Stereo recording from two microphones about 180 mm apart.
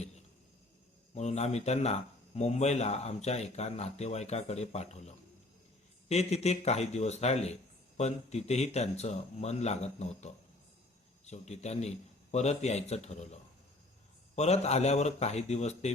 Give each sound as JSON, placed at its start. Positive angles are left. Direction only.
{"t": 1.1, "sound": "speech", "side_deg": 40}